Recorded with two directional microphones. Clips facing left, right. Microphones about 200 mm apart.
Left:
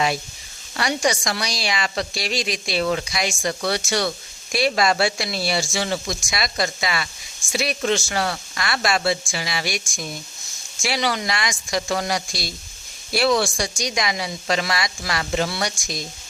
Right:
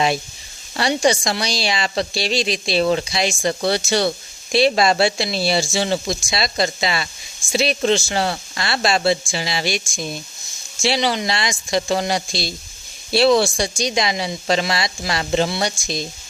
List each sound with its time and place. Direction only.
0.8 s a woman's voice: 30° right (ahead or behind)